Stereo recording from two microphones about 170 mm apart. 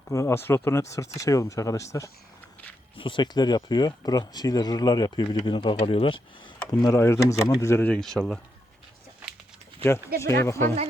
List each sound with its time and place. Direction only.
0.1 s speech: 15° left (ahead or behind)
2.9 s speech: 30° left (ahead or behind)
6.8 s speech: 15° left (ahead or behind)
10.2 s speech: 15° left (ahead or behind)